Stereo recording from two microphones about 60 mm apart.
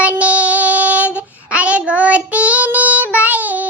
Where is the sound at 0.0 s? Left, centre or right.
Right.